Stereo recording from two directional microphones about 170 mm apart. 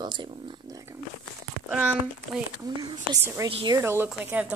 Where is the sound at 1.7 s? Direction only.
10° right (ahead or behind).